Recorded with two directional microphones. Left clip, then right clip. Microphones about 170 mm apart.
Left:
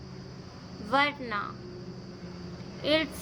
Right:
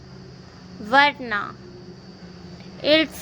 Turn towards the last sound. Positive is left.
turn(degrees=-40)  # may be behind; listen again after turning